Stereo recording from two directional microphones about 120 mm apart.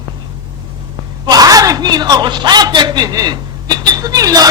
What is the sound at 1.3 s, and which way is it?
A man's voice, 30° right (ahead or behind).